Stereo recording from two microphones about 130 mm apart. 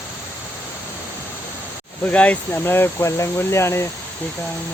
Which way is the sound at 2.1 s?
10° left (ahead or behind).